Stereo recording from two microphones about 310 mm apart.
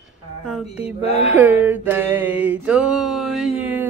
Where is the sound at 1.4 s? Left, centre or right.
Centre.